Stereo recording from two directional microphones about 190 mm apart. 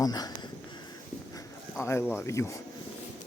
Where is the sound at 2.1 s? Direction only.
15° left (ahead or behind).